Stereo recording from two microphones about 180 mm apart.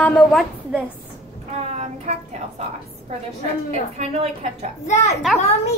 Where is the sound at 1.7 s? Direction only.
40° right (ahead or behind).